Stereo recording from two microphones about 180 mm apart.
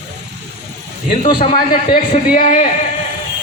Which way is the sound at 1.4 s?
50° left (ahead or behind).